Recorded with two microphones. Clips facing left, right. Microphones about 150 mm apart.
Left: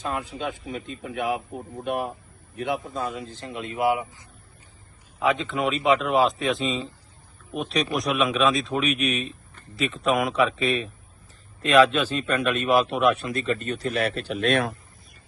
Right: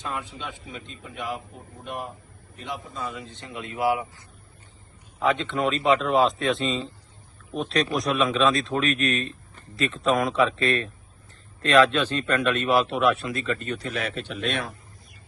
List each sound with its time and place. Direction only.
0.0 s speech: 40° left (ahead or behind); by 4.3 s 20° left (ahead or behind)
5.2 s speech: centre (ahead or behind); by 13.1 s 20° left (ahead or behind)
13.4 s speech: 40° left (ahead or behind)
14.3 s speech: 45° left (ahead or behind)